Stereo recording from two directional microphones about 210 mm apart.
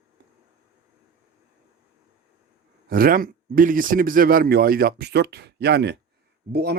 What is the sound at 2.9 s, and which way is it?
Speech, 45° right (ahead or behind).